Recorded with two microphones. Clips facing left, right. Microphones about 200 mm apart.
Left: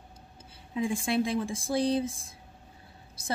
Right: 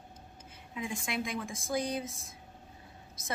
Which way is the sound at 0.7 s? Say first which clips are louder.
Left 8 dB; 30° left (ahead or behind).